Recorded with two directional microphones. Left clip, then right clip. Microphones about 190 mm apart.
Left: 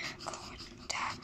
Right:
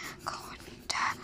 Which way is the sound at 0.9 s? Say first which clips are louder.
Right 6 dB; 5° left (ahead or behind).